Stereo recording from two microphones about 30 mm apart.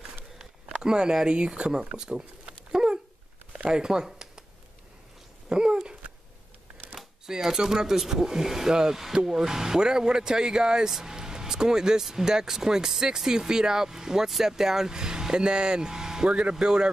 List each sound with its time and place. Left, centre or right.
0.4 s a sound: right
1.2 s speech: right
2.4 s dog: right
3.5 s speech: right
5.5 s dog: right
7.2 s speech: centre
16.3 s speech: right